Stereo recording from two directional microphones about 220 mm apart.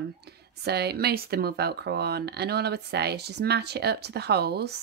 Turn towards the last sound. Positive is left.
turn(degrees=-50)  # may be behind; listen again after turning